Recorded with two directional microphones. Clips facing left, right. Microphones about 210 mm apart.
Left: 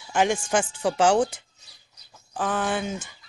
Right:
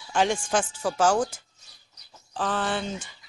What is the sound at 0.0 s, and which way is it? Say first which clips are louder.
Speech: left 1 dB; 10° left (ahead or behind).